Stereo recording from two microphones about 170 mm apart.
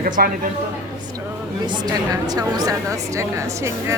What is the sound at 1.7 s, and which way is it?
A woman's voice, 25° right (ahead or behind).